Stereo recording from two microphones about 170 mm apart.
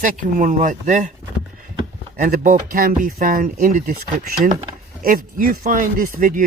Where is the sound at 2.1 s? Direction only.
55° right (ahead or behind).